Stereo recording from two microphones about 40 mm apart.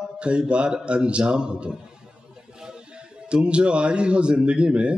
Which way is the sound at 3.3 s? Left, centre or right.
Right.